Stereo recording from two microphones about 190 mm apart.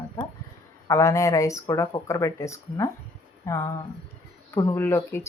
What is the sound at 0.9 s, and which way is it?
Speech, 15° left (ahead or behind).